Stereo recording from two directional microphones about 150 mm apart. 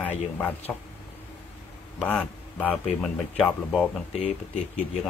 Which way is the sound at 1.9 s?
10° left (ahead or behind).